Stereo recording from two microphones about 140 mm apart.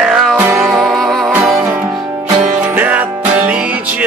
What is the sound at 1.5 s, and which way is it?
Music, 20° right (ahead or behind).